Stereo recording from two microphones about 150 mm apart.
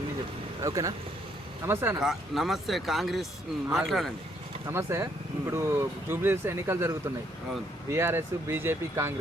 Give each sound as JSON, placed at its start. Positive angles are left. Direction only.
{"t": 0.6, "sound": "speech", "side_deg": -20}
{"t": 2.0, "sound": "speech", "side_deg": 0}
{"t": 4.6, "sound": "speech", "side_deg": -20}